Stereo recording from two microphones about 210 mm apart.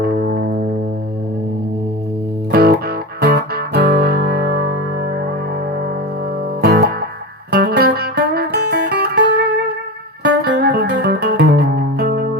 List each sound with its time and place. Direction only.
0.0 s music: 50° right (ahead or behind)
2.5 s music: 45° right (ahead or behind)
6.6 s music: 50° right (ahead or behind)